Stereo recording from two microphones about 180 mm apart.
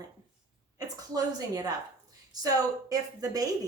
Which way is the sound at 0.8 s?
20° right (ahead or behind).